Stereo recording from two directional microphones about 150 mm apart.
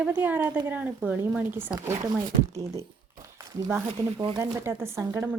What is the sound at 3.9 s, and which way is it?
Speech, 35° right (ahead or behind).